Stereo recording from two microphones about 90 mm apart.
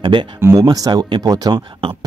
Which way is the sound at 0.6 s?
45° right (ahead or behind).